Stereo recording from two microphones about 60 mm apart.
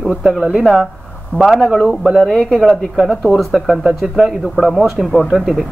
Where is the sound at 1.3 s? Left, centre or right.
Left.